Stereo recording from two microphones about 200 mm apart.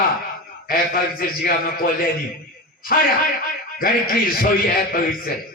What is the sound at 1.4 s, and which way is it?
Speech, 45° left (ahead or behind).